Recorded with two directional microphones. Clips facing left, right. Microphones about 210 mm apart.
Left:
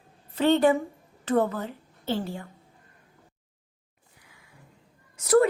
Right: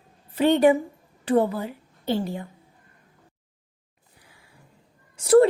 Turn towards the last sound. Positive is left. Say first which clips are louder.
# right 4 dB
turn(degrees=-30)  # may be behind; listen again after turning